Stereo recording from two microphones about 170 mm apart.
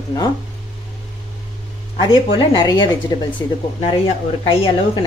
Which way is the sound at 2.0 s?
30° left (ahead or behind).